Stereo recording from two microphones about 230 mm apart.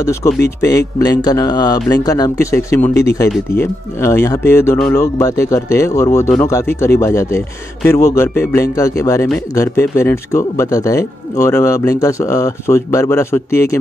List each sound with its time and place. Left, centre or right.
0.0 s a man's voice: centre